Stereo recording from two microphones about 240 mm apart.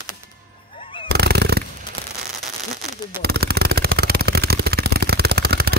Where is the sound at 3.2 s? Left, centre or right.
Right.